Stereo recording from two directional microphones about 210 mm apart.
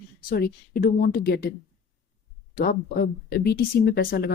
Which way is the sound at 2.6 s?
45° left (ahead or behind).